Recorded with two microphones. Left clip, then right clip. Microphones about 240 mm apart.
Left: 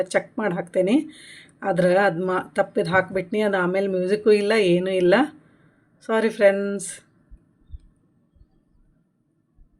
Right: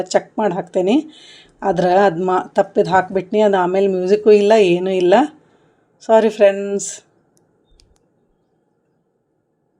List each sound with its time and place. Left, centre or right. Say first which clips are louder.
0.0 s speech: right 6 dB; centre